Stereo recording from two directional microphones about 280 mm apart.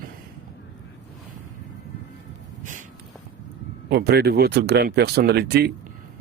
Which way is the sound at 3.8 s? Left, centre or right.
Right.